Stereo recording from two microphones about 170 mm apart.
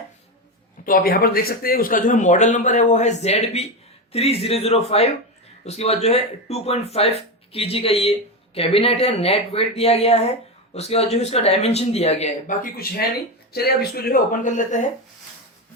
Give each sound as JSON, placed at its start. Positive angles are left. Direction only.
{"t": 0.9, "sound": "a man's voice", "side_deg": 60}
{"t": 12.6, "sound": "speech", "side_deg": 60}